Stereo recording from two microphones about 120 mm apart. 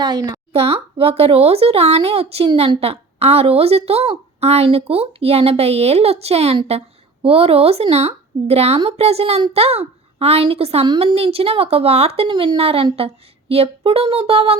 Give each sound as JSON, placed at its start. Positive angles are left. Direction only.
{"t": 0.0, "sound": "a woman's voice", "side_deg": -35}
{"t": 0.5, "sound": "a woman's voice", "side_deg": -55}